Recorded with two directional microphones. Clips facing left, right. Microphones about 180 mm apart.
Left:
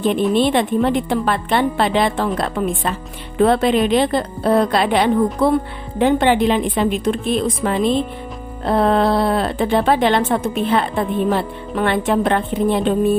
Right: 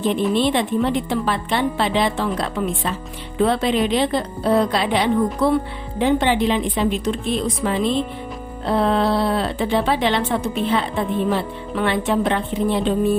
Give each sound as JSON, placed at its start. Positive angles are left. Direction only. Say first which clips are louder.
{"t": 0.0, "sound": "a woman's voice", "louder": "left 3 dB", "side_deg": 55}